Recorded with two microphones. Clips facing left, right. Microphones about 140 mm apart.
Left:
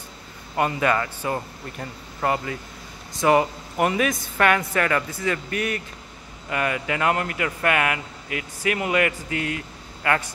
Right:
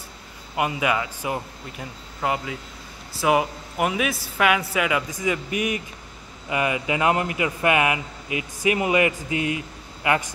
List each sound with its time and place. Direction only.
0.6 s a man's voice: 10° right (ahead or behind)